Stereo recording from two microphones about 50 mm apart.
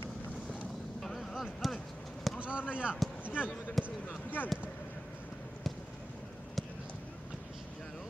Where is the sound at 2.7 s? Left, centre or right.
Right.